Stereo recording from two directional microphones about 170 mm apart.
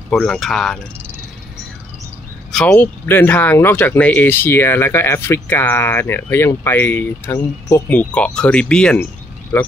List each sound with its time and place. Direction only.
0.1 s speech: centre (ahead or behind)
2.5 s speech: 10° left (ahead or behind)